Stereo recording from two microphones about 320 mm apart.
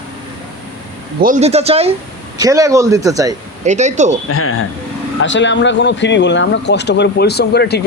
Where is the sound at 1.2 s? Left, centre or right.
Right.